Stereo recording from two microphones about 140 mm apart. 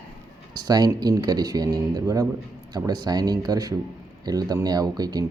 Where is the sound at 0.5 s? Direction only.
30° right (ahead or behind).